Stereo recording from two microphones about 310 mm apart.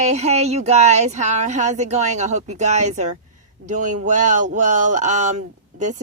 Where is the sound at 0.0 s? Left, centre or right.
Right.